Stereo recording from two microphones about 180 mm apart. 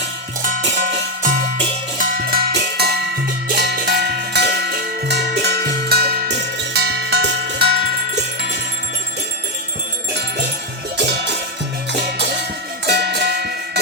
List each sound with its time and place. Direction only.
0.8 s music: 45° right (ahead or behind); by 3.1 s 65° right (ahead or behind)
3.5 s cowbell: 65° right (ahead or behind)
10.9 s music: 75° right (ahead or behind)